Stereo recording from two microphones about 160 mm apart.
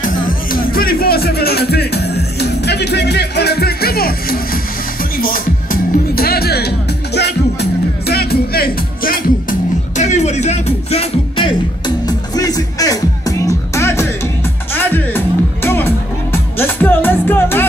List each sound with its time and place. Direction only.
0.0 s music: 60° left (ahead or behind)
5.1 s music: 60° left (ahead or behind); by 6.7 s 80° left
8.1 s music: 75° left (ahead or behind); by 11.5 s 35° left (ahead or behind)
12.1 s music: 25° left (ahead or behind)